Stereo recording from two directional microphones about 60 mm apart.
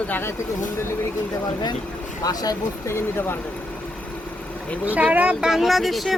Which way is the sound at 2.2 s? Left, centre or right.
Left.